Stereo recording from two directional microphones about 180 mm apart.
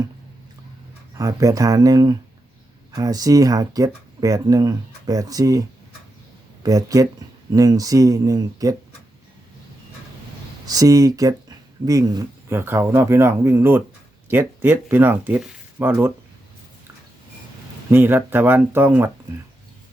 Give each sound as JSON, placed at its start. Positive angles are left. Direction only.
{"t": 1.2, "sound": "speech", "side_deg": -20}
{"t": 10.7, "sound": "speech", "side_deg": -20}
{"t": 17.9, "sound": "speech", "side_deg": -10}